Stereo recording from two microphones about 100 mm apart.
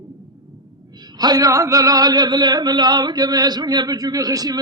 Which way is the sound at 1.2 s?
40° right (ahead or behind).